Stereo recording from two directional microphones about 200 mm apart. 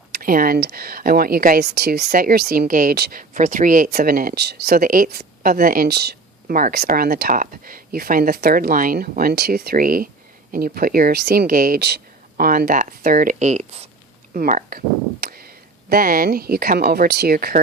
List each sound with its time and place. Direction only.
0.1 s speech: 45° right (ahead or behind)
14.3 s speech: 45° right (ahead or behind)